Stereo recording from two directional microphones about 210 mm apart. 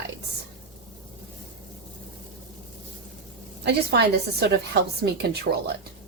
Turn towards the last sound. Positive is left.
turn(degrees=-50)  # may be behind; listen again after turning